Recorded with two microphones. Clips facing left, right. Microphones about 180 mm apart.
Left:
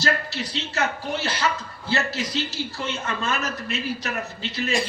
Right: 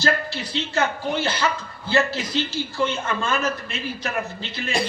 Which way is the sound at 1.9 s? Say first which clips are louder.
Right 4 dB; 30° right (ahead or behind).